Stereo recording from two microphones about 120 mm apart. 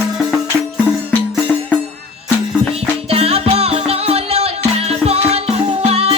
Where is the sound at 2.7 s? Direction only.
55° right (ahead or behind).